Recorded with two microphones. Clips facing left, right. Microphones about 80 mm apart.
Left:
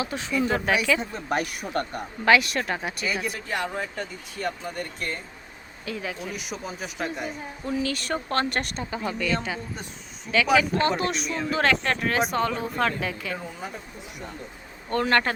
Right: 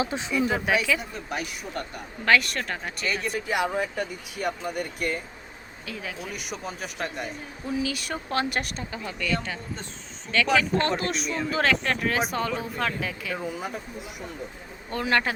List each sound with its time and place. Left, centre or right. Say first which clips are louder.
0.0 s speech: right 2 dB; right
0.3 s speech: left 1 dB; centre
1.3 s speech: left 6 dB; left
2.2 s speech: left 2 dB; centre
3.5 s speech: right 4 dB; centre
14.8 s speech: left 2 dB; centre